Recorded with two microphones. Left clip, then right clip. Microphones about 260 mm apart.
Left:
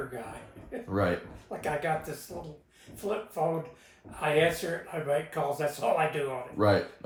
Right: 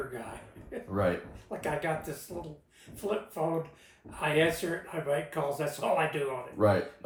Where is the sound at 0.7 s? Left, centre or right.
Centre.